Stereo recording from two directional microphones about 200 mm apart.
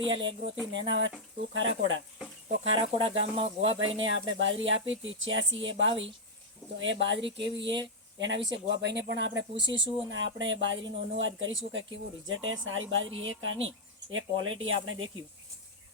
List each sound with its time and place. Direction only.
0.0 s speech: 65° right (ahead or behind)
2.7 s speech: 30° right (ahead or behind)
4.4 s speech: 70° right (ahead or behind); by 15.2 s 90° right